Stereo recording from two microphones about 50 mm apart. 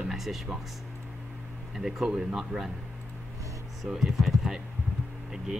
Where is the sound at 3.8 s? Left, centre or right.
Centre.